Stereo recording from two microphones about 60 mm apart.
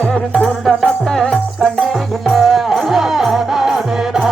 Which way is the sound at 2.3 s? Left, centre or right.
Centre.